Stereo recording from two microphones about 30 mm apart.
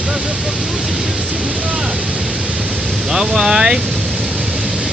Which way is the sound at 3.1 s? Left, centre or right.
Centre.